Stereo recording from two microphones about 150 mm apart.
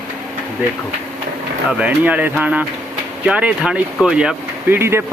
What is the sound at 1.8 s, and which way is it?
Speech, 10° right (ahead or behind).